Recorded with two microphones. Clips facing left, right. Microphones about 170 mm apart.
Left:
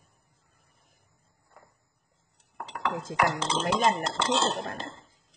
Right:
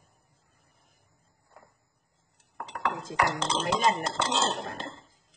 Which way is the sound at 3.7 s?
Centre (ahead or behind).